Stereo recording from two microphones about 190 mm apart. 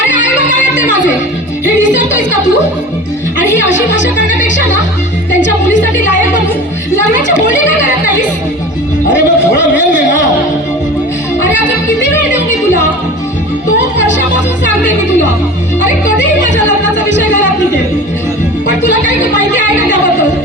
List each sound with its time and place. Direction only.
0.1 s music: 75° left (ahead or behind)
3.5 s speech: 75° left (ahead or behind)
5.4 s a sound: 70° left (ahead or behind)
9.0 s music: 70° left (ahead or behind)
16.1 s speech: 70° left (ahead or behind)
16.8 s music: 70° left (ahead or behind)